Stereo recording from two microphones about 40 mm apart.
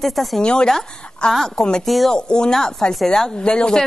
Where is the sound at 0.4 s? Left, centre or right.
Left.